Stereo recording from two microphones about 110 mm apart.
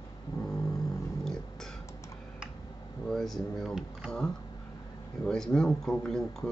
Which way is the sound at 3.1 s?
5° left (ahead or behind).